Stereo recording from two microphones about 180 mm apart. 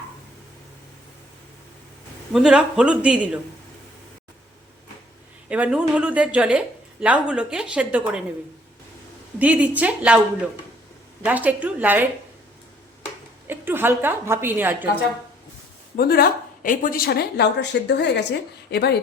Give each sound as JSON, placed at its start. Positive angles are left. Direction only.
{"t": 2.3, "sound": "speech", "side_deg": -5}
{"t": 5.5, "sound": "a woman's voice", "side_deg": -5}
{"t": 9.4, "sound": "a woman's voice", "side_deg": -10}
{"t": 11.3, "sound": "a woman's voice", "side_deg": -10}
{"t": 13.5, "sound": "a woman's voice", "side_deg": -10}
{"t": 16.0, "sound": "speech", "side_deg": 55}